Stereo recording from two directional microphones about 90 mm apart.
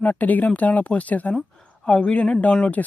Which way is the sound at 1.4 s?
5° left (ahead or behind).